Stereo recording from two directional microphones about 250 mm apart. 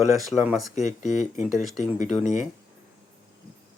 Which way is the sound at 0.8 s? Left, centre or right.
Left.